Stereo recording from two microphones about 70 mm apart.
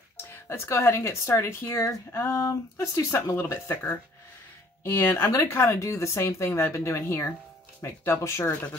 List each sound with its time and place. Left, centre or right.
0.2 s speech: left